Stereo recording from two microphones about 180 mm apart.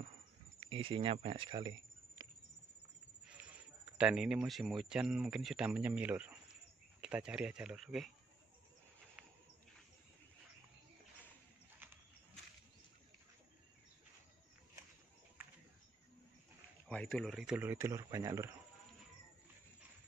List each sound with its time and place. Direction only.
0.6 s speech: 30° right (ahead or behind)
3.3 s a sound: 5° right (ahead or behind)
4.0 s speech: 5° right (ahead or behind)
11.8 s horse: 10° right (ahead or behind)
16.8 s speech: 5° left (ahead or behind); by 18.5 s 15° right (ahead or behind)